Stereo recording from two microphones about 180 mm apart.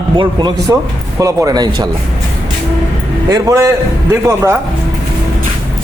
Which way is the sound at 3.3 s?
20° right (ahead or behind).